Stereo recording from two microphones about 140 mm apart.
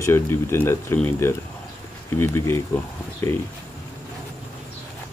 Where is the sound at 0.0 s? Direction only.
15° left (ahead or behind).